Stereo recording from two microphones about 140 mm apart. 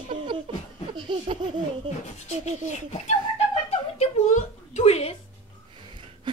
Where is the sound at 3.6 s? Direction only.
50° left (ahead or behind).